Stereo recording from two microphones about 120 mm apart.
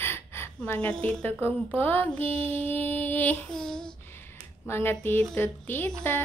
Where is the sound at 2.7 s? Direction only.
15° left (ahead or behind).